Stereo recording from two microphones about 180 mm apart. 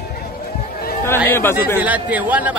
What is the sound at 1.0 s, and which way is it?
Speech, 10° left (ahead or behind).